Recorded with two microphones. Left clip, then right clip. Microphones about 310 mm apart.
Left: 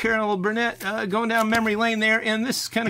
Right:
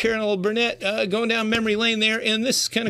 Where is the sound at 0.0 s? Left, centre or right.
Centre.